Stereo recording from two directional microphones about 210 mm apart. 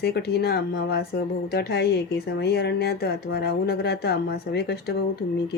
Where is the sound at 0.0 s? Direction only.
50° left (ahead or behind).